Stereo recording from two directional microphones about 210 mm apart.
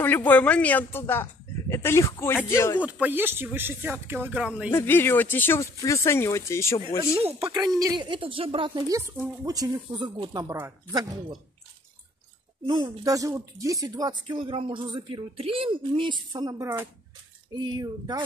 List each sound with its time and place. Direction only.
0.0 s speech: 10° left (ahead or behind)
2.8 s speech: 10° right (ahead or behind)
4.7 s speech: 10° left (ahead or behind)
7.2 s speech: 30° right (ahead or behind)
7.4 s speech: 15° right (ahead or behind)
12.6 s speech: 20° right (ahead or behind)